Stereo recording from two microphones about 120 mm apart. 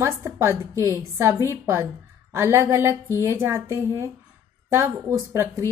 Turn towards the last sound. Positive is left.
turn(degrees=-25)  # may be behind; listen again after turning